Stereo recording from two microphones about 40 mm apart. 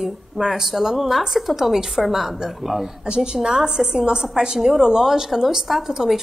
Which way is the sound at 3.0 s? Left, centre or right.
Right.